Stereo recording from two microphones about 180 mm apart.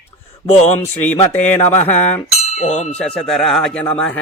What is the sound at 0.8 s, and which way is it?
Speech, 10° left (ahead or behind).